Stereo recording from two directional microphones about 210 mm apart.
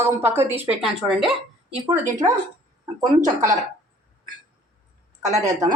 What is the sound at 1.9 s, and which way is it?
Speech, 15° right (ahead or behind).